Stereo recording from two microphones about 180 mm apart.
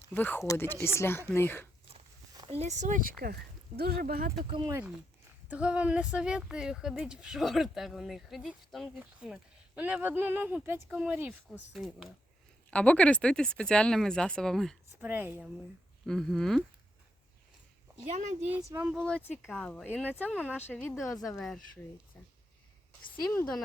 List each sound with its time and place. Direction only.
0.1 s speech: 10° left (ahead or behind)
2.5 s speech: 40° right (ahead or behind)
4.4 s speech: 30° right (ahead or behind)
5.5 s speech: 5° right (ahead or behind)
15.0 s speech: 10° right (ahead or behind)
16.0 s speech: centre (ahead or behind)
18.4 s speech: 10° right (ahead or behind)
18.9 s speech: 5° left (ahead or behind)
20.7 s speech: centre (ahead or behind)
23.3 s speech: 10° left (ahead or behind)